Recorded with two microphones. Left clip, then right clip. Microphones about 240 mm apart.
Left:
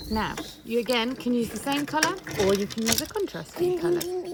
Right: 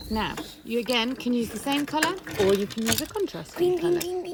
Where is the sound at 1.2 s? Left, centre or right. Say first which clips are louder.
Left 1 dB; right.